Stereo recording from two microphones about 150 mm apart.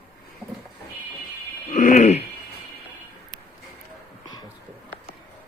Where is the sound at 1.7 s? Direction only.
55° left (ahead or behind).